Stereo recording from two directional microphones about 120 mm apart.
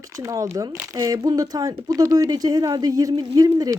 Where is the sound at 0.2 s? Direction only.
25° right (ahead or behind).